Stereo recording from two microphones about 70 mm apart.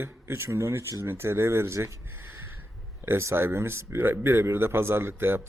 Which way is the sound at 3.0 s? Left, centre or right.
Right.